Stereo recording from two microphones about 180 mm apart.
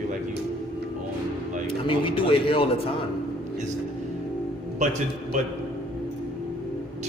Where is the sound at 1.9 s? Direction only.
30° left (ahead or behind).